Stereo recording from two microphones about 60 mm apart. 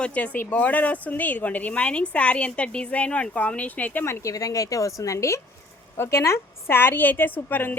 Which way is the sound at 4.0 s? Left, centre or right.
Left.